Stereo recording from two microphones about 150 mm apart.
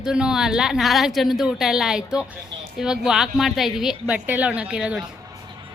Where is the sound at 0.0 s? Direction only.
5° right (ahead or behind).